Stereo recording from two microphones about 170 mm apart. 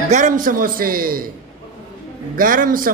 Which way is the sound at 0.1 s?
50° right (ahead or behind).